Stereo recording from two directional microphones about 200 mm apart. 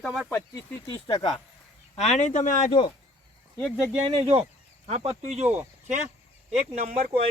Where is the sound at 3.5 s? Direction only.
Centre (ahead or behind).